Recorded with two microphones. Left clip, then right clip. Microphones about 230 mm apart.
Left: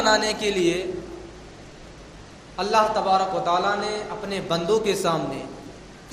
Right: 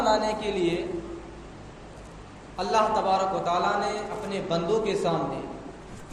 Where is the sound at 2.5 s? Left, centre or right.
Left.